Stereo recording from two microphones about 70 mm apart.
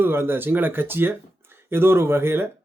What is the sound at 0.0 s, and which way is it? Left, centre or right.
Speech, right.